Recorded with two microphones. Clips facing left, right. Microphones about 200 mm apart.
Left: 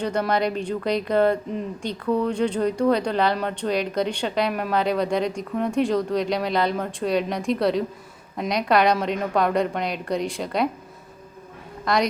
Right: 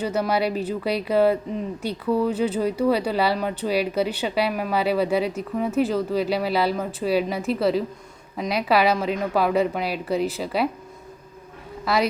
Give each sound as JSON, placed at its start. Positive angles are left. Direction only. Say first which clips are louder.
{"t": 0.0, "sound": "a woman's voice", "louder": "even", "side_deg": -5}
{"t": 11.9, "sound": "a woman's voice", "louder": "even", "side_deg": -5}